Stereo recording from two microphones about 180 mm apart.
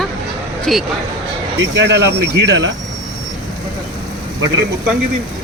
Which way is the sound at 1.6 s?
80° right.